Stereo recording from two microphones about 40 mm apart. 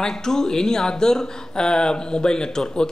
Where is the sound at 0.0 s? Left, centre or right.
Centre.